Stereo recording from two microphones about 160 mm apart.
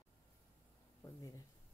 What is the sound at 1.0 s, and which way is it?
Speech, 15° left (ahead or behind).